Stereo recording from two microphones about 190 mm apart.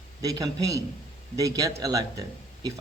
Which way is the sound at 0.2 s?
20° right (ahead or behind).